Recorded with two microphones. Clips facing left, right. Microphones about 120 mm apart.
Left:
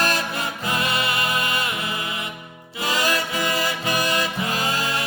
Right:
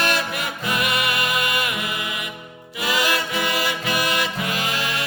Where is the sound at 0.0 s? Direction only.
30° left (ahead or behind).